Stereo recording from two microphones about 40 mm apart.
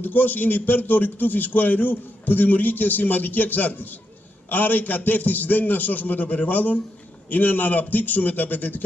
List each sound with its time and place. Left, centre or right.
0.0 s a man's voice: left